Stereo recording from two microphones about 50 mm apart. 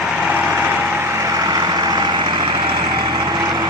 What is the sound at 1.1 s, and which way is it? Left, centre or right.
Vehicle, right.